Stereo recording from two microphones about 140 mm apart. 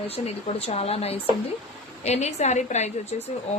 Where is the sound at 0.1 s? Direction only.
45° left (ahead or behind).